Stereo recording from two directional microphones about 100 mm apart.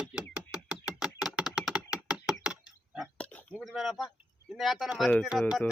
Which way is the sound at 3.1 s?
15° left (ahead or behind).